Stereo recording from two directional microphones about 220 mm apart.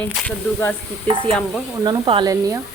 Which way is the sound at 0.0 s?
5° left (ahead or behind).